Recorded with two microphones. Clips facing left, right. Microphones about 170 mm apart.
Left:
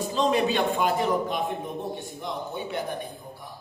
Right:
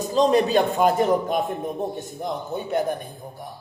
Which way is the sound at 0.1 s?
40° right (ahead or behind).